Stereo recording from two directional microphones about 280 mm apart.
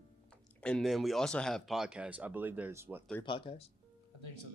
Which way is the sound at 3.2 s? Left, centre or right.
Centre.